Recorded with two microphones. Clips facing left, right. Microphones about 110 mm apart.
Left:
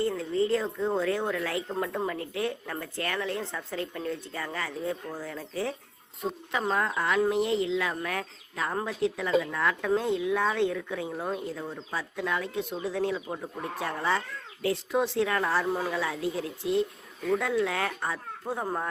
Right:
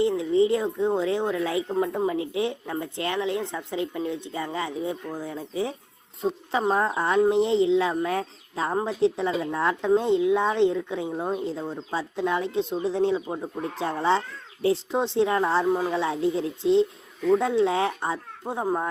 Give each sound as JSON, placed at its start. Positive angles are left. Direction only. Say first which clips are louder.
{"t": 0.0, "sound": "a woman's voice", "louder": "right 6 dB", "side_deg": -20}
{"t": 6.2, "sound": "speech", "louder": "right 5 dB", "side_deg": -25}
{"t": 15.9, "sound": "speech", "louder": "right 6 dB", "side_deg": -25}